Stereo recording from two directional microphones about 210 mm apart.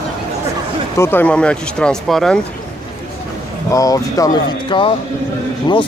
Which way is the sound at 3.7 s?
15° left (ahead or behind).